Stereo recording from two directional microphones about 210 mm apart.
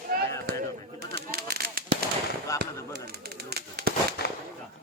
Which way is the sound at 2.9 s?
50° right (ahead or behind).